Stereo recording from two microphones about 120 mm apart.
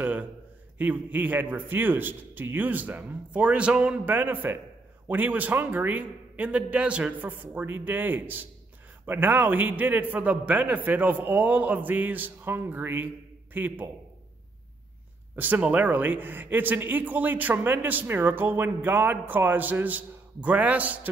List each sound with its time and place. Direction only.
0.0 s a sound: 15° right (ahead or behind)
0.7 s speech: 15° right (ahead or behind)
15.3 s speech: 15° right (ahead or behind)